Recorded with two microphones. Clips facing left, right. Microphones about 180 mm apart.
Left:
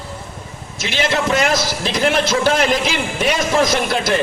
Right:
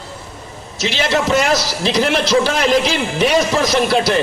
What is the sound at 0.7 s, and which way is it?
A man's voice, 50° left (ahead or behind).